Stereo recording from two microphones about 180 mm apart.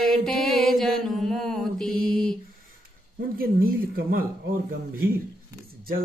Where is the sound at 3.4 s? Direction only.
55° right (ahead or behind).